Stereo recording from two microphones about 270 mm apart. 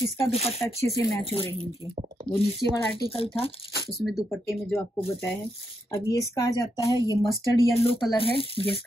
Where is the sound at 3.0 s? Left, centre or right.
Centre.